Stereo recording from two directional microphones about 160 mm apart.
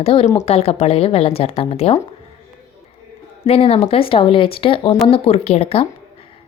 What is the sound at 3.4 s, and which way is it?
A woman's voice, 40° left (ahead or behind).